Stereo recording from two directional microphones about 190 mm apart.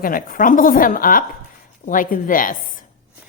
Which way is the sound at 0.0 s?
45° left (ahead or behind).